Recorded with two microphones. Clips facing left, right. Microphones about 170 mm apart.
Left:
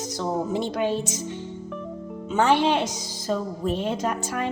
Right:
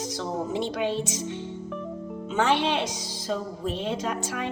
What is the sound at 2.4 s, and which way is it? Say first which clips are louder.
A woman's voice: left 4 dB; 45° left (ahead or behind).